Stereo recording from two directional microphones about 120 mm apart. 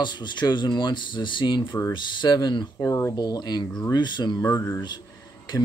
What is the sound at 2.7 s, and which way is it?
Speech, 25° left (ahead or behind).